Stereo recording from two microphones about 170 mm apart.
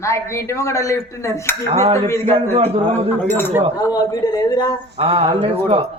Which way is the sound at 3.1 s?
10° left (ahead or behind).